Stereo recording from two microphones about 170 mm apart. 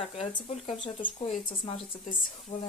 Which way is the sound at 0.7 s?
25° left (ahead or behind).